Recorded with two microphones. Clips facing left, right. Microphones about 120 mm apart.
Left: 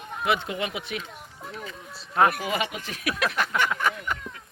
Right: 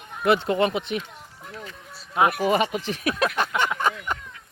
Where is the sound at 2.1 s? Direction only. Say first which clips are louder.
Even; 15° right (ahead or behind).